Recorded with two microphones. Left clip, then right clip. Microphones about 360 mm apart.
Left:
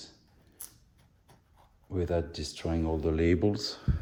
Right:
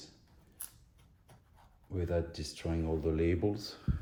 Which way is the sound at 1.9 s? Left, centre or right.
Left.